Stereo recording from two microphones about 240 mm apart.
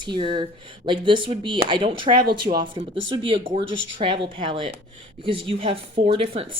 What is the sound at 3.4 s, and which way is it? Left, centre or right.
Speech, right.